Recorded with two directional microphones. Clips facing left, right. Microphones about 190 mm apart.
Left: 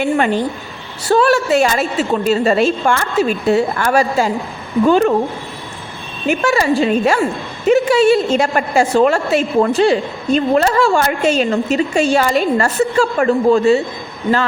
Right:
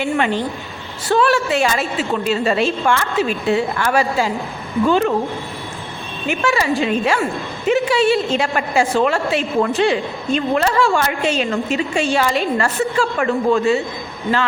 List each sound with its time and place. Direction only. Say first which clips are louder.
0.0 s a woman's voice: left 3 dB; 45° left (ahead or behind)
6.2 s a woman's voice: left 4 dB; 40° left (ahead or behind)